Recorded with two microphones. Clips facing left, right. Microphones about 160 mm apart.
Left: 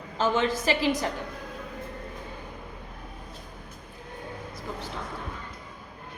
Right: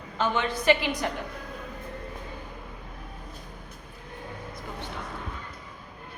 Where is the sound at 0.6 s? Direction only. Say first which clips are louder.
Right 3 dB; 35° left (ahead or behind).